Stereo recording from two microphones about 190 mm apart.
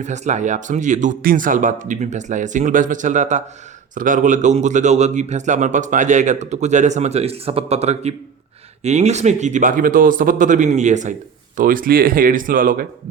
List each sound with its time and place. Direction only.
0.0 s speech: 40° right (ahead or behind)